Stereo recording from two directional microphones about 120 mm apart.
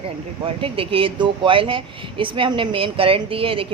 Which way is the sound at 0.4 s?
50° right (ahead or behind).